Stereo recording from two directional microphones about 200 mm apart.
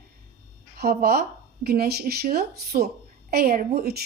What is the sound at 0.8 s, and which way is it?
A woman's voice, 50° right (ahead or behind).